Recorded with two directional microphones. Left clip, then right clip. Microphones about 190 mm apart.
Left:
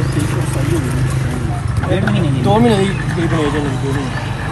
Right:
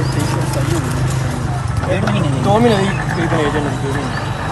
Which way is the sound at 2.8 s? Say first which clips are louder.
Even; 35° right (ahead or behind).